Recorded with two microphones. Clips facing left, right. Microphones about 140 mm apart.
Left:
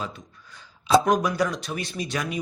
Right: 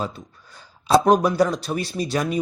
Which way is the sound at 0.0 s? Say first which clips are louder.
Right 5 dB; 35° right (ahead or behind).